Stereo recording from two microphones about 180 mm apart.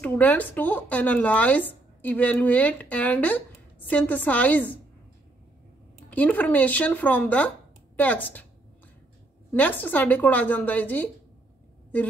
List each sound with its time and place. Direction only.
0.0 s speech: 10° left (ahead or behind)
6.1 s speech: 10° left (ahead or behind)
9.5 s speech: 10° left (ahead or behind)